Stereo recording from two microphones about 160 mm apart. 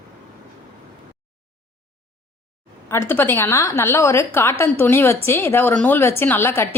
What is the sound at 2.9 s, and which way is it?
Speech, 15° left (ahead or behind).